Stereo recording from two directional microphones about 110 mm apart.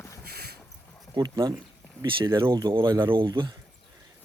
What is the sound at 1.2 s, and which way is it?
A man's voice, 40° right (ahead or behind).